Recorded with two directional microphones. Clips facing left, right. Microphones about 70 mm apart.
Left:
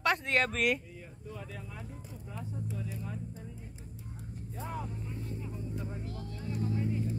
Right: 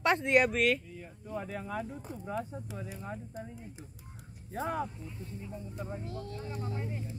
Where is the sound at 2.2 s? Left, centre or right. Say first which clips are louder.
Right 4 dB; right.